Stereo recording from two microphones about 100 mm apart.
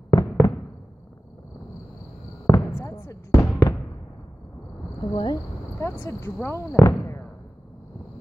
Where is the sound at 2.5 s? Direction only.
30° left (ahead or behind).